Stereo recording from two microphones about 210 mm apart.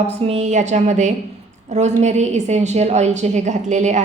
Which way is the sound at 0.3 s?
30° right (ahead or behind).